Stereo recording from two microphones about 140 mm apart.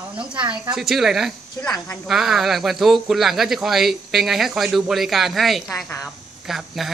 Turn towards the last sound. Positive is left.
turn(degrees=0)  # may be behind; listen again after turning